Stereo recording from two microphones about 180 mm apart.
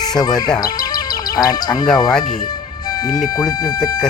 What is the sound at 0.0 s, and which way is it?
Speech, 20° left (ahead or behind).